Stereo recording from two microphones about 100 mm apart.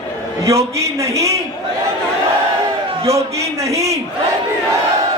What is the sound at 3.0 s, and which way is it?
Speech, 30° right (ahead or behind).